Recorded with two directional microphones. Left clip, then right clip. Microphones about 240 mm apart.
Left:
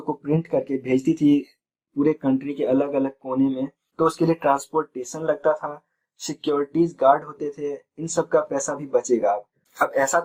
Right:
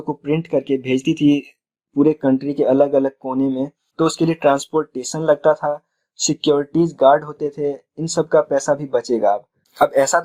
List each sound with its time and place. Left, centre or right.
0.0 s speech: right